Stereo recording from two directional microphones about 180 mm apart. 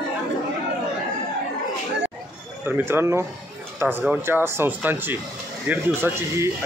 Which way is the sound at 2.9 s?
15° right (ahead or behind).